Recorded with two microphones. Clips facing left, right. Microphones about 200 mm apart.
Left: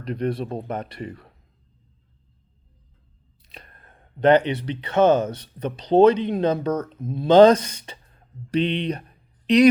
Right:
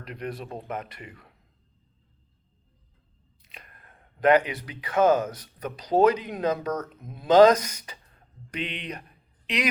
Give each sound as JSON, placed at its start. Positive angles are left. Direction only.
{"t": 0.0, "sound": "speech", "side_deg": 35}
{"t": 3.4, "sound": "speech", "side_deg": 35}